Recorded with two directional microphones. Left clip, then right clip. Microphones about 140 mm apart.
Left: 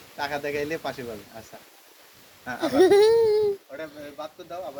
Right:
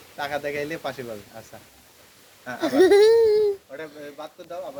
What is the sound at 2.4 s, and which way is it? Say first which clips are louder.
Speech: right 1 dB; 30° right (ahead or behind).